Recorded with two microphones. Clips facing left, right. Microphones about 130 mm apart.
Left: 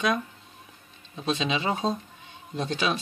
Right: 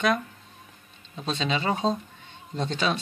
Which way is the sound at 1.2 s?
10° left (ahead or behind).